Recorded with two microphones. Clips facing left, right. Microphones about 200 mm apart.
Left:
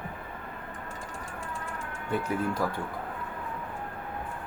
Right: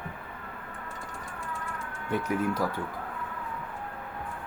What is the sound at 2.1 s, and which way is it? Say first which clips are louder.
Speech: right 1 dB; 10° right (ahead or behind).